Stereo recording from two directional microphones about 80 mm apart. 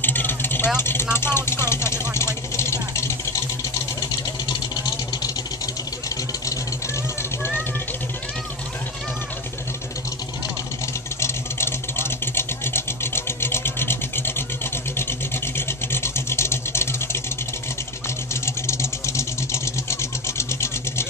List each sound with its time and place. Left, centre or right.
0.0 s vehicle: left
0.7 s speech: left
2.1 s vehicle: left
4.5 s vehicle: left
6.0 s vehicle: left
11.1 s vehicle: left
18.3 s sewing machine: left